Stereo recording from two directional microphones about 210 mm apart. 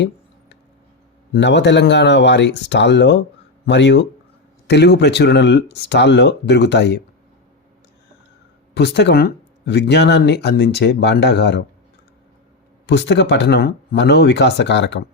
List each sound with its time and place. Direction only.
1.3 s speech: 55° left (ahead or behind)
8.7 s speech: 55° left (ahead or behind)
12.8 s speech: 55° left (ahead or behind)